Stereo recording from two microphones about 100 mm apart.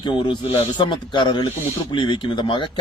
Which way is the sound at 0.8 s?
50° left (ahead or behind).